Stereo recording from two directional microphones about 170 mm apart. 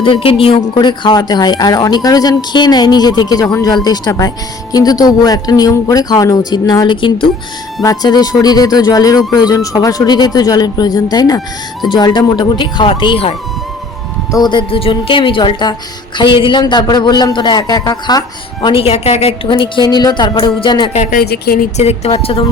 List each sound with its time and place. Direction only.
0.0 s speech: 30° left (ahead or behind)
14.3 s speech: 25° left (ahead or behind)
18.6 s speech: 35° left (ahead or behind)
20.9 s speech: 45° left (ahead or behind)
21.2 s speech: 60° left (ahead or behind)
21.8 s a woman's voice: 40° left (ahead or behind)